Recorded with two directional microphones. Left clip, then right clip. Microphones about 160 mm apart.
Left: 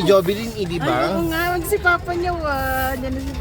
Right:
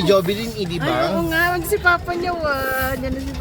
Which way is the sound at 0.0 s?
35° left (ahead or behind).